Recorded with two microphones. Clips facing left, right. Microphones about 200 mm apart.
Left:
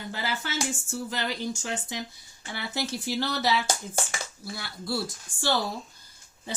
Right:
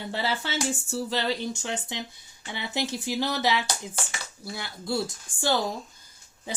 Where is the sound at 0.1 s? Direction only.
30° right (ahead or behind).